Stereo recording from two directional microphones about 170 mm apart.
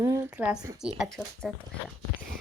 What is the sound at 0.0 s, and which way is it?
A woman's voice, 15° right (ahead or behind).